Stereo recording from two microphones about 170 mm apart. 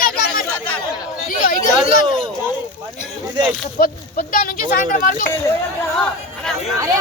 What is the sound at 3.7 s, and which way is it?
Speech, 55° left (ahead or behind).